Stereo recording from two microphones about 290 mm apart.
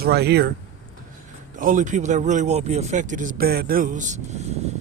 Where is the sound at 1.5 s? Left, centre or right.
Right.